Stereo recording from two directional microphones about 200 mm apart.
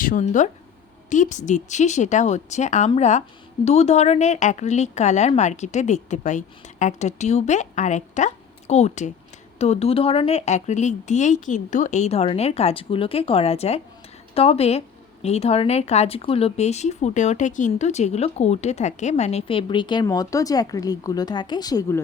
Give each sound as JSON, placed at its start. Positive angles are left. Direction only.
{"t": 0.0, "sound": "a woman's voice", "side_deg": 40}